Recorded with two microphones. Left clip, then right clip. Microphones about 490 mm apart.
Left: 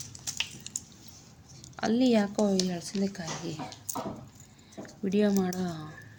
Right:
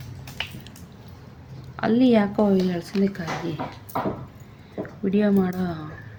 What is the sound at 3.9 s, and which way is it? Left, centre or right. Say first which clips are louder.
Dog: right 9 dB; left.